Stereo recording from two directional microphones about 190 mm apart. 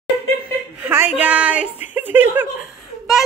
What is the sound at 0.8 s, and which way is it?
A woman's voice, 10° right (ahead or behind).